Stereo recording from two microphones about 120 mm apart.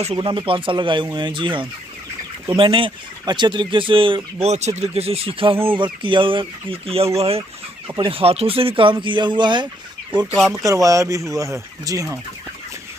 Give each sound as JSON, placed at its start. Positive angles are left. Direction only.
{"t": 0.0, "sound": "speech", "side_deg": -45}
{"t": 4.5, "sound": "speech", "side_deg": -65}
{"t": 7.2, "sound": "chicken", "side_deg": -55}
{"t": 8.0, "sound": "speech", "side_deg": -50}
{"t": 10.5, "sound": "speech", "side_deg": -30}